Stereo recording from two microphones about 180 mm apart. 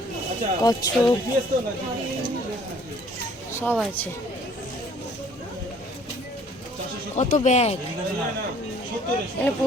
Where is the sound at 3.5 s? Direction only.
10° left (ahead or behind).